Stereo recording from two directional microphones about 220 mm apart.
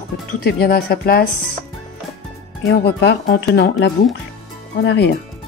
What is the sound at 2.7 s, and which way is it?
Speech, 50° left (ahead or behind).